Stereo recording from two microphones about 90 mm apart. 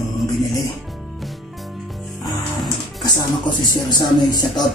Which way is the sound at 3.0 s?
50° left (ahead or behind).